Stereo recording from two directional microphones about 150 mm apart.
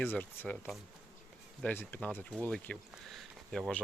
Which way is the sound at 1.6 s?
15° left (ahead or behind).